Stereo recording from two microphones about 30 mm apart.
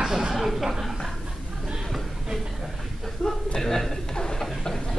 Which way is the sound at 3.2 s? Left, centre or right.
Left.